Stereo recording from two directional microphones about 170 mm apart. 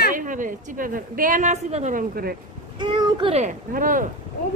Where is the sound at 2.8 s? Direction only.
25° right (ahead or behind).